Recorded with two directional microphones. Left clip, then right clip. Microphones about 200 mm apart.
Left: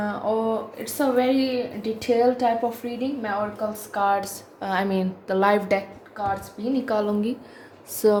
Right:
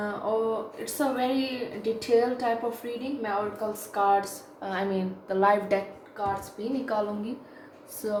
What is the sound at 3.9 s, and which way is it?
A woman's voice, 50° left (ahead or behind).